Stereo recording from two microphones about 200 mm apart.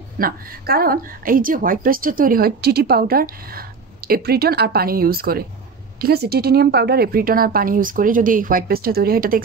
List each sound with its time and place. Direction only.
0.2 s a woman's voice: 50° right (ahead or behind)